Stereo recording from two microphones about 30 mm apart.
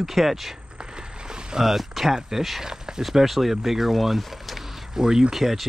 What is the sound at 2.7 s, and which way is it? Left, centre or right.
Speech, centre.